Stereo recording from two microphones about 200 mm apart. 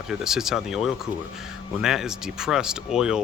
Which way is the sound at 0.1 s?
5° right (ahead or behind).